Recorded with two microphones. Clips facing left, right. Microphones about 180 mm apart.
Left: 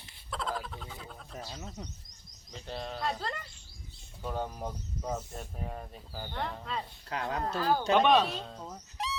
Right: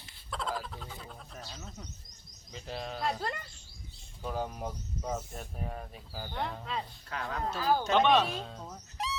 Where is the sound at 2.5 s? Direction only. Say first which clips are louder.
Even; centre (ahead or behind).